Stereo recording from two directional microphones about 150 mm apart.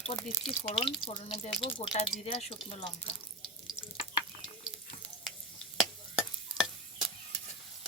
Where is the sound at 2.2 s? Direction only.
60° left (ahead or behind).